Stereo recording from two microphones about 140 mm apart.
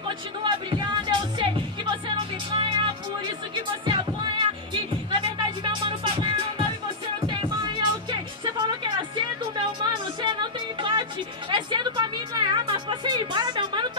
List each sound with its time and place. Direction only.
0.4 s music: 35° right (ahead or behind)